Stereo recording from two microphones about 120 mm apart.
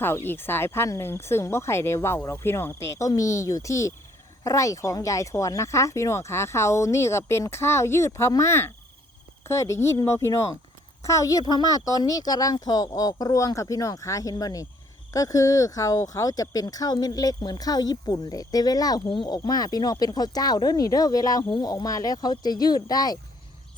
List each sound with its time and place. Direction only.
0.0 s speech: 20° left (ahead or behind)